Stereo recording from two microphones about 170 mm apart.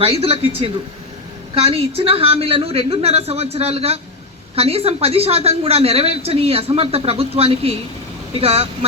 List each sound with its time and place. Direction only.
0.0 s a woman's voice: 35° right (ahead or behind)